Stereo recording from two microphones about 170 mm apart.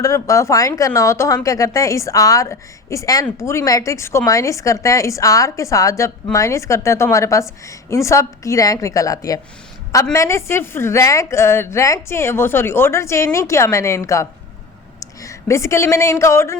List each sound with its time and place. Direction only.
0.0 s a woman's voice: 20° left (ahead or behind)